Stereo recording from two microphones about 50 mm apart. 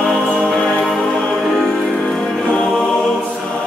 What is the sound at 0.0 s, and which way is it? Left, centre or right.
Music, centre.